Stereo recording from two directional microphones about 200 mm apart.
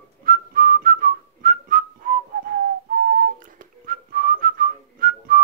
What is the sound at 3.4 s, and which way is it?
Whistling, 45° right (ahead or behind).